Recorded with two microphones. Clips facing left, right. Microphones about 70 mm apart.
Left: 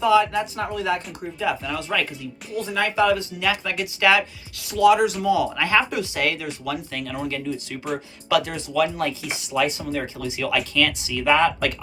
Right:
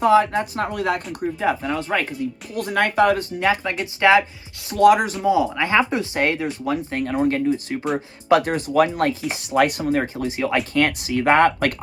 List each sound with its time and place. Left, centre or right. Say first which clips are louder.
0.0 s speech: right 2 dB; right
2.6 s speech: right 3 dB; right
5.2 s speech: right 2 dB; right